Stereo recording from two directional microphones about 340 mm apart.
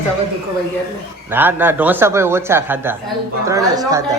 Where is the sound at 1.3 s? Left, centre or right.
Centre.